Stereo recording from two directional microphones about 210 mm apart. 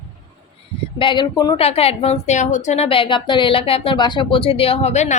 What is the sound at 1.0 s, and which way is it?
A woman's voice, 20° left (ahead or behind).